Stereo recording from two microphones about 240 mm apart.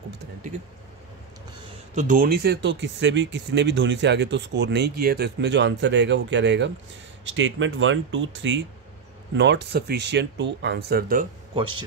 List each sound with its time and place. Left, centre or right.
2.0 s speech: right